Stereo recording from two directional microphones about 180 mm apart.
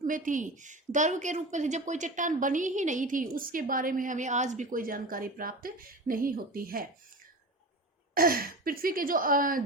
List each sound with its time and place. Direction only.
0.1 s a woman's voice: 45° right (ahead or behind)
8.1 s a woman's voice: 55° right (ahead or behind)